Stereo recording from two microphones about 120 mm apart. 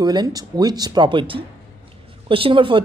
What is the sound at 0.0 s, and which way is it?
Speech, 35° right (ahead or behind).